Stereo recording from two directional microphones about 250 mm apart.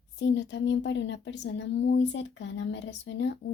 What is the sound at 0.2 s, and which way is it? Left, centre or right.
Speech, left.